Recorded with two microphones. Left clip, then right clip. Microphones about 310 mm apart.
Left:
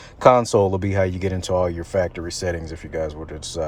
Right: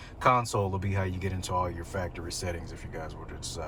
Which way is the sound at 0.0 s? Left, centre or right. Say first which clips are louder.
Left 10 dB; left.